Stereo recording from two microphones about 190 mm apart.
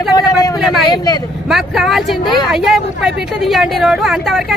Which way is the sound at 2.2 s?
25° left (ahead or behind).